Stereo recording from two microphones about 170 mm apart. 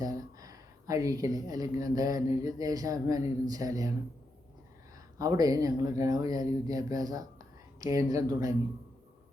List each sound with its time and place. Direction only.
0.0 s speech: 20° right (ahead or behind)
5.1 s speech: 20° right (ahead or behind)